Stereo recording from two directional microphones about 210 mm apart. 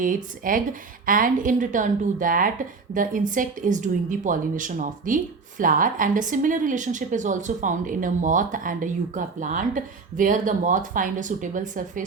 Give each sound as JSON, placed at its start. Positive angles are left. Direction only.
{"t": 0.0, "sound": "speech", "side_deg": -40}